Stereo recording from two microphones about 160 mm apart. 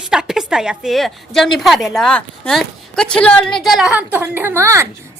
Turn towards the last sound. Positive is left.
turn(degrees=-20)  # may be behind; listen again after turning